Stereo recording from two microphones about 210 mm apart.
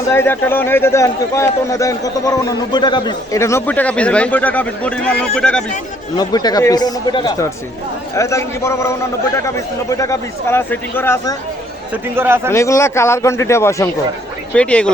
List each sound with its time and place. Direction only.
0.1 s a man's voice: 10° left (ahead or behind)
6.1 s a man's voice: 20° left (ahead or behind)
10.0 s a man's voice: 15° left (ahead or behind)
12.1 s a man's voice: 10° right (ahead or behind)
12.5 s a man's voice: 15° left (ahead or behind)